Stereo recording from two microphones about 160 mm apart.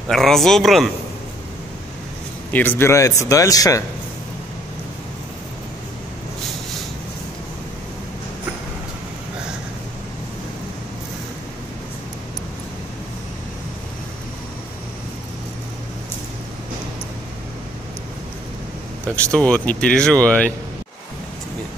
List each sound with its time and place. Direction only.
0.1 s a man's voice: centre (ahead or behind)
2.5 s speech: 10° left (ahead or behind)
19.3 s speech: 10° left (ahead or behind)